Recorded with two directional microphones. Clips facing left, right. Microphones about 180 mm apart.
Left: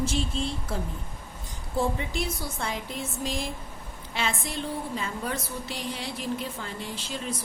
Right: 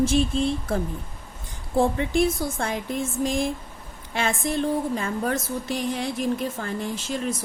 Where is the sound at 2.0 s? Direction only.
50° right (ahead or behind).